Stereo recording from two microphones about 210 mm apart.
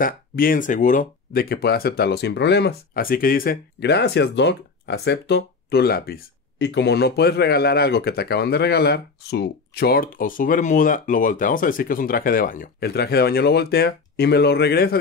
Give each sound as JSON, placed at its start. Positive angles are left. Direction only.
{"t": 0.0, "sound": "speech", "side_deg": 40}